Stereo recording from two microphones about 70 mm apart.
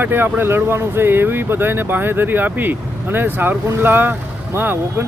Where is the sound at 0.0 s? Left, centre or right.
Right.